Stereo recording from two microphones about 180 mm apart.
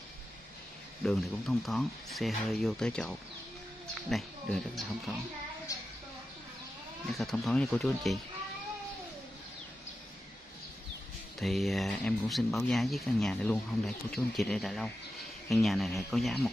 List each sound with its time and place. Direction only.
1.0 s speech: centre (ahead or behind)
7.2 s speech: centre (ahead or behind)
11.3 s speech: centre (ahead or behind)